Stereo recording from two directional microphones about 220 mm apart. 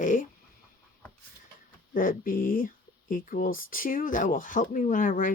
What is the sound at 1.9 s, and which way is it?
Speech, 40° left (ahead or behind).